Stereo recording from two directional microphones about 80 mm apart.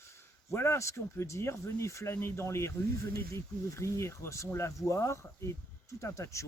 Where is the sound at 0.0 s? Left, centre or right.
Left.